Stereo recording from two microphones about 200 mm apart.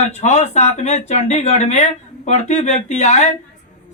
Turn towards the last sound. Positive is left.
turn(degrees=35)  # may be behind; listen again after turning